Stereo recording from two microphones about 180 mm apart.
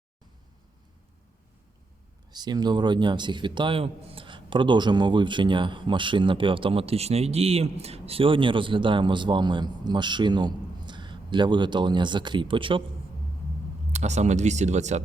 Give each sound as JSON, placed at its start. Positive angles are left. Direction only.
{"t": 2.3, "sound": "speech", "side_deg": -20}
{"t": 13.9, "sound": "speech", "side_deg": -40}